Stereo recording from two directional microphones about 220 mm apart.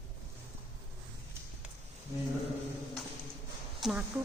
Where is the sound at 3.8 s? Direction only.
Centre (ahead or behind).